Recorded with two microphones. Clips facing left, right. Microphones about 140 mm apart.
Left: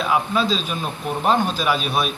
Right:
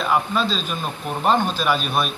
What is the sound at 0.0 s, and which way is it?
A man's voice, 5° left (ahead or behind).